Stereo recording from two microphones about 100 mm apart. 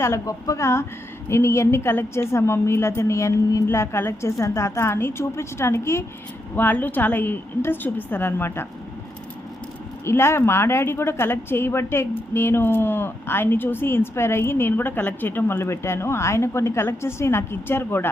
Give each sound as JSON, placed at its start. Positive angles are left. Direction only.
{"t": 0.0, "sound": "speech", "side_deg": 30}
{"t": 10.1, "sound": "speech", "side_deg": 25}